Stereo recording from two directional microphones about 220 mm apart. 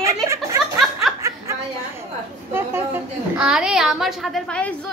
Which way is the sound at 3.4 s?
5° right (ahead or behind).